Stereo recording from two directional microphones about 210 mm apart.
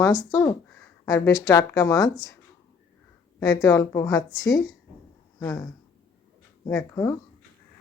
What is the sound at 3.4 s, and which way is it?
Speech, 15° left (ahead or behind).